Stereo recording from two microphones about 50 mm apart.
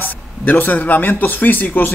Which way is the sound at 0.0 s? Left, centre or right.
Left.